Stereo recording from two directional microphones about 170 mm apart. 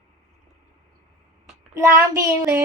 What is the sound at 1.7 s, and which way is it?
Speech, 15° right (ahead or behind).